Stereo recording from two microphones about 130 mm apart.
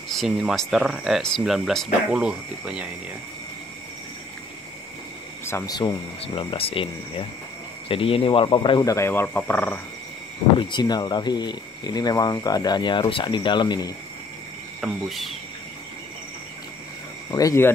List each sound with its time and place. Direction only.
0.1 s speech: centre (ahead or behind)
5.4 s speech: 20° left (ahead or behind)
6.2 s speech: 45° left (ahead or behind); by 9.8 s 10° left (ahead or behind)
10.6 s speech: 35° left (ahead or behind)
14.8 s speech: centre (ahead or behind)
17.3 s speech: 25° left (ahead or behind)